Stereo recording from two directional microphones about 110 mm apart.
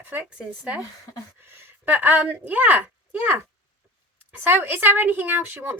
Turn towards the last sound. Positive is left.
turn(degrees=-15)  # may be behind; listen again after turning